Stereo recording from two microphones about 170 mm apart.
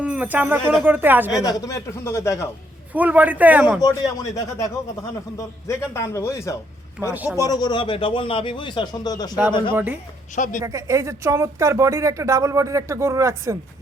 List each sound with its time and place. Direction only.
0.0 s speech: 10° right (ahead or behind)
1.3 s speech: 20° left (ahead or behind)
2.9 s speech: 10° right (ahead or behind)
3.8 s speech: 20° left (ahead or behind)
5.4 s a man's voice: 15° left (ahead or behind)
7.1 s speech: 10° right (ahead or behind)
7.3 s speech: 20° left (ahead or behind)
9.7 s speech: 10° right (ahead or behind)
10.3 s speech: 50° left (ahead or behind)
10.6 s speech: 20° right (ahead or behind)